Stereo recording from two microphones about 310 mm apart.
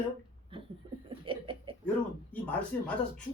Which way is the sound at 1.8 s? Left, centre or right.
Centre.